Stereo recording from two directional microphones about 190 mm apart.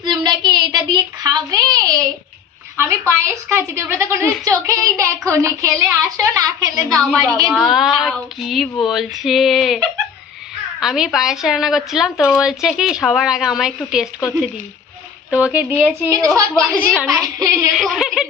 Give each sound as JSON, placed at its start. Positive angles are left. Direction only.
{"t": 0.0, "sound": "a sound", "side_deg": -20}
{"t": 2.7, "sound": "a woman's voice", "side_deg": -15}
{"t": 7.0, "sound": "speech", "side_deg": 5}
{"t": 16.0, "sound": "a woman's voice", "side_deg": -15}
{"t": 17.7, "sound": "speech", "side_deg": 0}